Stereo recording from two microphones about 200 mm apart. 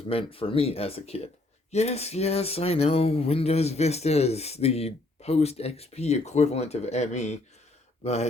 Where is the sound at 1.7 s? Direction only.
30° left (ahead or behind).